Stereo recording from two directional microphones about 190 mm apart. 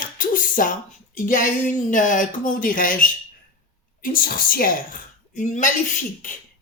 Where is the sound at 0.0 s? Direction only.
45° left (ahead or behind).